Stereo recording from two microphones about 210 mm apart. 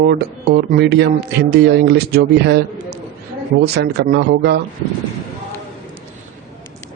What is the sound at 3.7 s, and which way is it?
Speech, 50° right (ahead or behind).